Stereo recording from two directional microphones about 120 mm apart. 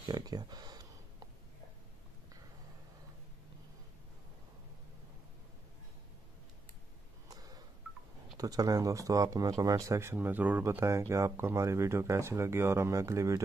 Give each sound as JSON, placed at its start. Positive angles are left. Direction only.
{"t": 0.1, "sound": "speech", "side_deg": -35}
{"t": 7.2, "sound": "telephone dialing", "side_deg": -30}
{"t": 8.4, "sound": "speech", "side_deg": -30}